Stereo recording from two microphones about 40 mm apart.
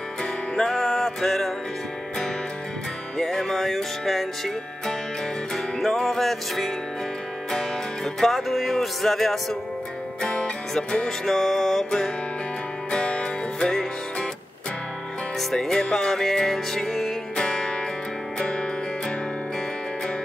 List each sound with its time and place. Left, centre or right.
0.2 s music: centre
3.2 s music: centre
5.8 s music: centre
10.2 s music: left
11.1 s music: centre
12.9 s music: left
15.5 s music: centre